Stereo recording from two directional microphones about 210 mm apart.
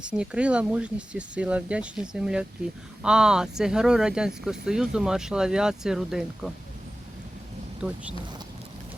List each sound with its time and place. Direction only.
0.0 s speech: 5° right (ahead or behind)
7.8 s speech: 5° right (ahead or behind)